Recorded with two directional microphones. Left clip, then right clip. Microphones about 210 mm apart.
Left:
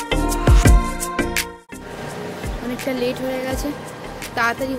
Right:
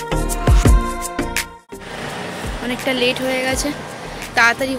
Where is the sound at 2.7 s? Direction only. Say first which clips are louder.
Right 5 dB; centre (ahead or behind).